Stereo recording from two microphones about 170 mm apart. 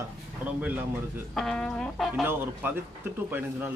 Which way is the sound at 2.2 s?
10° right (ahead or behind).